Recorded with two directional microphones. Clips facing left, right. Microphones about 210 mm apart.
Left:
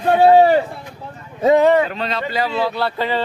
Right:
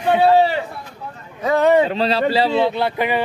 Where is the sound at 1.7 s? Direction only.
30° right (ahead or behind).